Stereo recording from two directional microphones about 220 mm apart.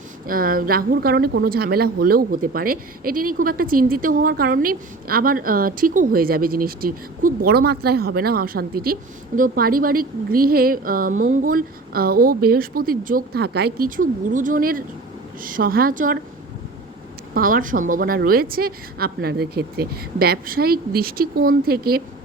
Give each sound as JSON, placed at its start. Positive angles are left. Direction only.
{"t": 0.3, "sound": "a woman's voice", "side_deg": -40}
{"t": 17.3, "sound": "speech", "side_deg": -40}